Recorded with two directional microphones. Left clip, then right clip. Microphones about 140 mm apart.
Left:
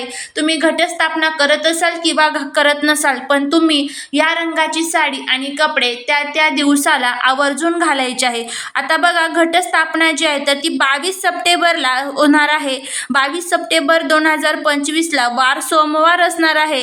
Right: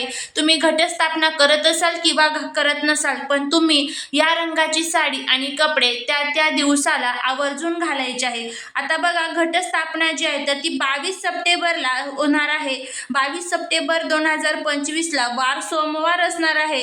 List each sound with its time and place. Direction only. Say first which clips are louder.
0.3 s a woman's voice: left 2 dB; 10° left (ahead or behind)
2.6 s a woman's voice: left 6 dB; 30° left (ahead or behind)
3.5 s a woman's voice: left 3 dB; 10° left (ahead or behind); by 16.8 s 30° left (ahead or behind)